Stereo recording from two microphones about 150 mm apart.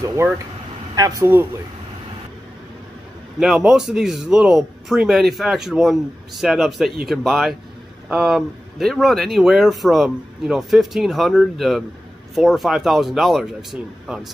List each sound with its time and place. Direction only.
0.0 s a man's voice: 25° right (ahead or behind)
3.3 s speech: 5° right (ahead or behind)